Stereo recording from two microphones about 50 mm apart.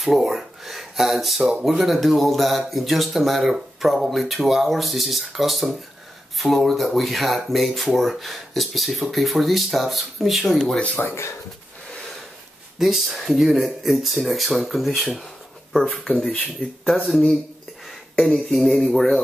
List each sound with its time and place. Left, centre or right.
0.0 s speech: centre
11.0 s speech: left
12.7 s speech: centre
18.2 s speech: centre